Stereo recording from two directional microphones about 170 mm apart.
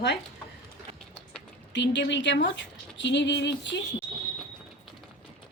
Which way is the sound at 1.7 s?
90° left.